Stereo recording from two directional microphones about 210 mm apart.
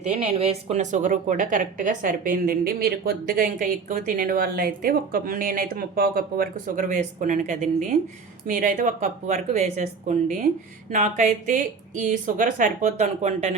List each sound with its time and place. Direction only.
0.0 s a woman's voice: 30° right (ahead or behind)